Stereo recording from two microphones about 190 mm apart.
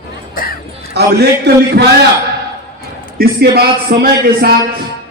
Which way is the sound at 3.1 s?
55° right (ahead or behind).